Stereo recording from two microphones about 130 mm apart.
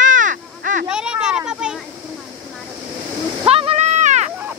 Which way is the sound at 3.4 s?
50° right (ahead or behind).